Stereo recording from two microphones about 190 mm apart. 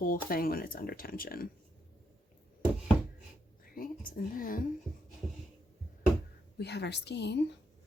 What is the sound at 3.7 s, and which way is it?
Speech, 50° left (ahead or behind).